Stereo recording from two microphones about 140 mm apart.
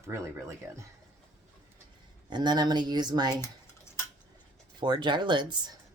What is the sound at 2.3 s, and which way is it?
Speech, 30° right (ahead or behind).